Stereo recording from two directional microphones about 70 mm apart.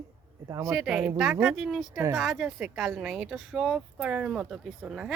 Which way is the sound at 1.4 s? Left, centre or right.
Centre.